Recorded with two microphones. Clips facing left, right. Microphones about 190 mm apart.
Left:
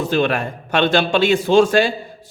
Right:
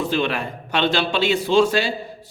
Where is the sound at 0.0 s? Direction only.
45° left (ahead or behind).